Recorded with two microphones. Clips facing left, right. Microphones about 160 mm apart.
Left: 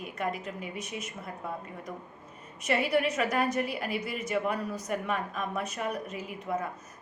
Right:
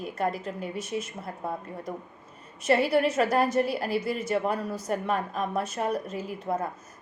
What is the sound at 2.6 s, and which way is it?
A woman's voice, 30° right (ahead or behind).